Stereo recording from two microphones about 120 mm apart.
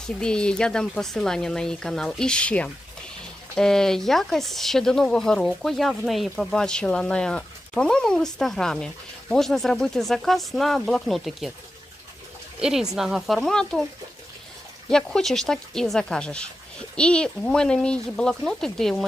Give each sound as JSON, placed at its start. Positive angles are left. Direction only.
{"t": 0.2, "sound": "speech", "side_deg": 5}
{"t": 12.5, "sound": "speech", "side_deg": -5}
{"t": 14.8, "sound": "speech", "side_deg": 5}